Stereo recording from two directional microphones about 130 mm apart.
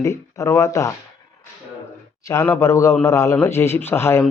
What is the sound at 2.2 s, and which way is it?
Speech, 20° left (ahead or behind).